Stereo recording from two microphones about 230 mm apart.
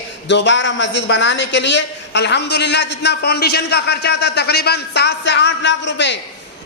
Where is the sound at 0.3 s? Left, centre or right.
Left.